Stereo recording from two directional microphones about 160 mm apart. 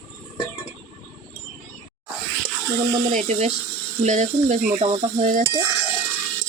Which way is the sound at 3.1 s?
45° right (ahead or behind).